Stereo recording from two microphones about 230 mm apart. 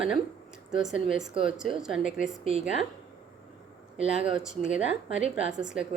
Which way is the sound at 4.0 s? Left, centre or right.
Centre.